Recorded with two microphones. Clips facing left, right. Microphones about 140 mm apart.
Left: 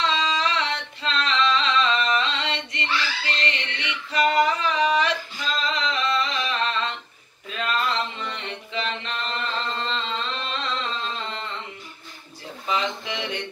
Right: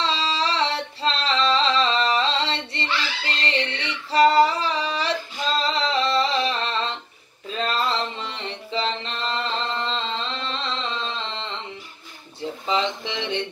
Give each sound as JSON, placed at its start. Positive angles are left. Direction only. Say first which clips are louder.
{"t": 0.0, "sound": "music", "louder": "even", "side_deg": -30}
{"t": 3.4, "sound": "female singing", "louder": "right 4 dB", "side_deg": -30}
{"t": 5.6, "sound": "music", "louder": "right 3 dB", "side_deg": -30}
{"t": 12.4, "sound": "a sound", "louder": "right 3 dB", "side_deg": -30}